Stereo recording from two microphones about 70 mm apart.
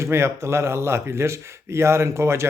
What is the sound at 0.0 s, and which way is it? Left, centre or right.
Speech, right.